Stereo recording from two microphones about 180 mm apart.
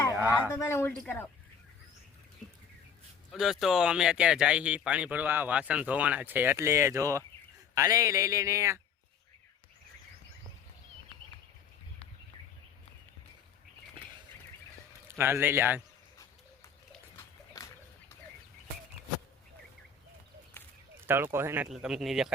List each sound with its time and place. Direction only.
0.1 s a sound: 10° right (ahead or behind)
0.5 s speech: 10° left (ahead or behind)
3.3 s speech: centre (ahead or behind)
15.2 s speech: 10° right (ahead or behind)
17.2 s splash: 20° left (ahead or behind)
20.6 s a sound: 10° left (ahead or behind)
21.3 s speech: 10° right (ahead or behind)